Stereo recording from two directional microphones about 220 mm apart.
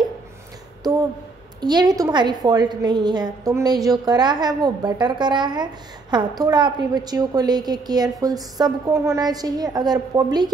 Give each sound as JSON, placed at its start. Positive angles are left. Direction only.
{"t": 1.6, "sound": "a woman's voice", "side_deg": -20}